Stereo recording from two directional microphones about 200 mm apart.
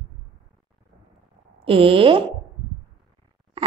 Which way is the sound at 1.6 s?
25° right (ahead or behind).